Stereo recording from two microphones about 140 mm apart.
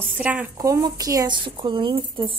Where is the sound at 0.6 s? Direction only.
25° right (ahead or behind).